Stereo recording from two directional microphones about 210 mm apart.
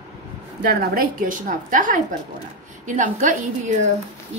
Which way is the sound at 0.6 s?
45° right (ahead or behind).